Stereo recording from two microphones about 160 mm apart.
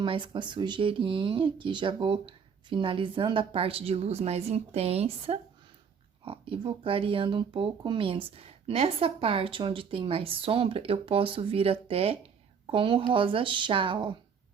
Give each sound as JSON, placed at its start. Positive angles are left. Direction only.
{"t": 0.0, "sound": "speech", "side_deg": -30}